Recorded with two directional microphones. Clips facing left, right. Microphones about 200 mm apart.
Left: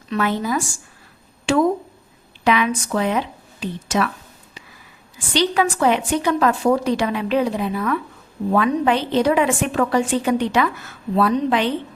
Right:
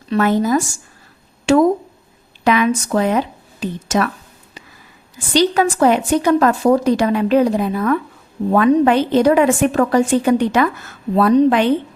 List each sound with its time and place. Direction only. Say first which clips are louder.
0.1 s a woman's voice: right 6 dB; 45° right (ahead or behind)
1.5 s a sound: right 5 dB; 40° right (ahead or behind)
2.4 s speech: right 4 dB; 45° right (ahead or behind)
5.1 s a woman's voice: right 4 dB; 40° right (ahead or behind)